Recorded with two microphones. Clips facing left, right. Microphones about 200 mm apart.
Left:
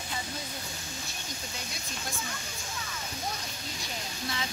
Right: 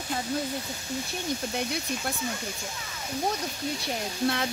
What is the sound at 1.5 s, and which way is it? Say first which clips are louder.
Speech: right 11 dB; 60° right (ahead or behind).